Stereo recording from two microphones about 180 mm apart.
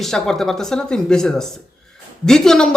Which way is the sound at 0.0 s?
Centre (ahead or behind).